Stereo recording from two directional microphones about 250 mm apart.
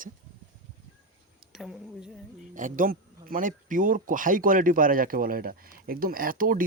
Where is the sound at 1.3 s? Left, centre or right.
Centre.